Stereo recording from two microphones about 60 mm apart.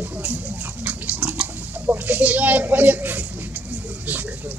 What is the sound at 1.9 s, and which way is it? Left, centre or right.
Speech, right.